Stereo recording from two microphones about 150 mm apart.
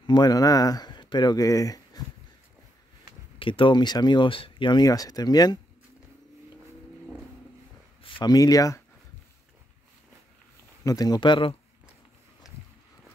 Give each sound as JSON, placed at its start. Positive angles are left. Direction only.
{"t": 0.0, "sound": "speech", "side_deg": 30}
{"t": 3.3, "sound": "speech", "side_deg": 35}
{"t": 8.0, "sound": "speech", "side_deg": 30}
{"t": 10.8, "sound": "speech", "side_deg": 25}